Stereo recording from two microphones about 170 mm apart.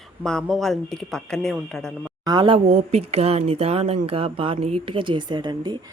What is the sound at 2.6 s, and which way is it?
Speech, 40° right (ahead or behind).